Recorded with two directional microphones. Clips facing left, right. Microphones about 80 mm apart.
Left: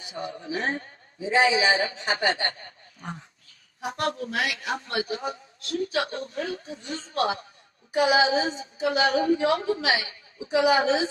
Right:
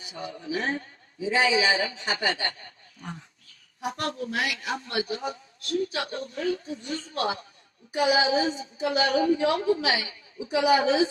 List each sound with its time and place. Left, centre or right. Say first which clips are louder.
0.0 s a man's voice: left 2 dB; left